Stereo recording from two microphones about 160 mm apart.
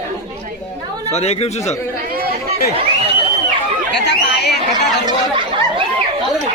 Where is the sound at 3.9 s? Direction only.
90° left.